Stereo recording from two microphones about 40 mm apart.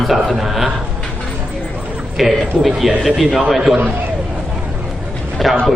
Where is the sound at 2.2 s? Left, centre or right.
Centre.